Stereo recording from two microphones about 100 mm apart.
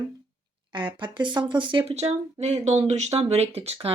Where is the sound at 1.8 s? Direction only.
90° right.